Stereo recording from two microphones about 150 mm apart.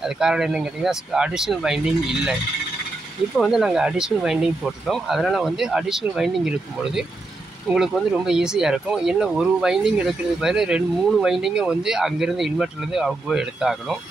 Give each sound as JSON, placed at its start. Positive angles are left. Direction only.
{"t": 0.0, "sound": "speech", "side_deg": -5}
{"t": 3.3, "sound": "speech", "side_deg": 0}